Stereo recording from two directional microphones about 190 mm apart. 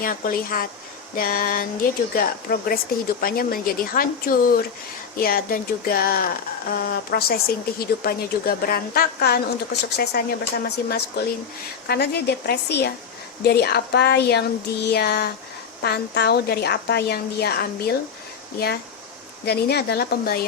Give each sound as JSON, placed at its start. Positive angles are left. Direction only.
{"t": 0.0, "sound": "a woman's voice", "side_deg": 50}